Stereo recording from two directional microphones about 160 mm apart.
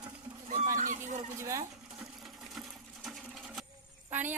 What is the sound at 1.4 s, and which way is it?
Speech, 20° right (ahead or behind).